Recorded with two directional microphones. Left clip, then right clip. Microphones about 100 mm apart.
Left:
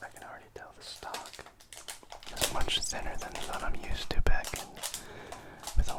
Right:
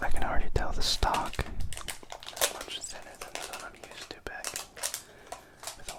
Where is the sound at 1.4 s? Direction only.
40° right (ahead or behind).